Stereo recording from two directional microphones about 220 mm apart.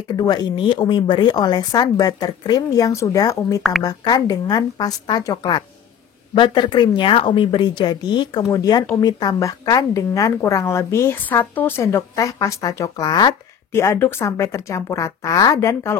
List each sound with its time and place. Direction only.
0.1 s a woman's voice: 20° left (ahead or behind)